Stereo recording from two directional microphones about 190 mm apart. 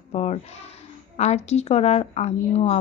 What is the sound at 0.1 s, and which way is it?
A child's voice, 35° left (ahead or behind).